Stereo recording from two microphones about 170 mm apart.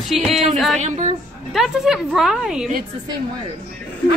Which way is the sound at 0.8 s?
45° right (ahead or behind).